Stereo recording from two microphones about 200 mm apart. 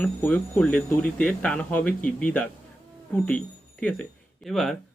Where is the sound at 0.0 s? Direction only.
10° left (ahead or behind).